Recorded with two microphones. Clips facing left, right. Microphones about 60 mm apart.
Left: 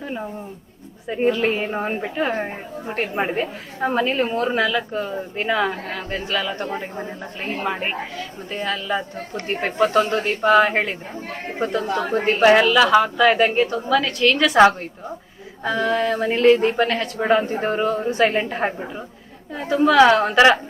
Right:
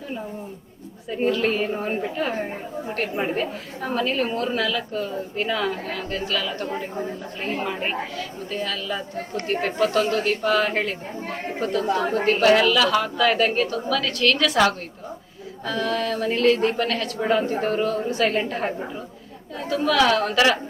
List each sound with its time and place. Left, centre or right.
1.0 s a woman's voice: left